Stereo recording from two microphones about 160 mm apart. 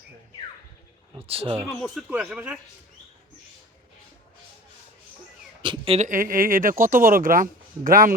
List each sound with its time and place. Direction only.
1.3 s speech: 35° right (ahead or behind)
1.7 s speech: centre (ahead or behind)
5.6 s a sound: 30° right (ahead or behind)
6.1 s speech: 60° right (ahead or behind)